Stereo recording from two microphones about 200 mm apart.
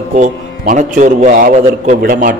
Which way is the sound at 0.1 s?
40° right (ahead or behind).